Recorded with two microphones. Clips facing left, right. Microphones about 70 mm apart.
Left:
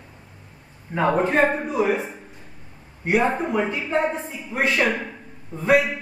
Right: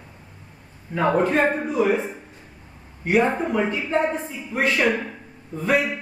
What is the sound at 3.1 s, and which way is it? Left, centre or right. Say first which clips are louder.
A man's voice: right 1 dB; centre.